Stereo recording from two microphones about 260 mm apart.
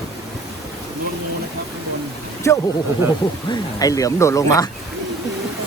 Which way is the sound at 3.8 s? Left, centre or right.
Centre.